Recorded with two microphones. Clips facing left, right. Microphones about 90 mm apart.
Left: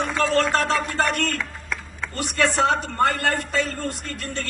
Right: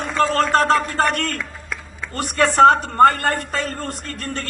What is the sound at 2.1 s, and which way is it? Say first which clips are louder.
A man's voice: right 7 dB; 45° right (ahead or behind).